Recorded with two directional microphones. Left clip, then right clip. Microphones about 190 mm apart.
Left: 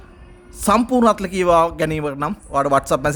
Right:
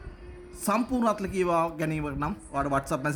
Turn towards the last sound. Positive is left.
turn(degrees=55)  # may be behind; listen again after turning